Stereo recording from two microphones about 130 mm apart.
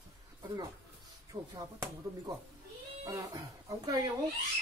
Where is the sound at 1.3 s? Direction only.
35° right (ahead or behind).